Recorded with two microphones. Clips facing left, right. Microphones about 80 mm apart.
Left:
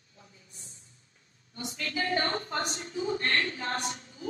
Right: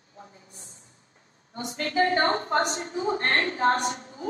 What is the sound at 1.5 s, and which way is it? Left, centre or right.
A woman's voice, right.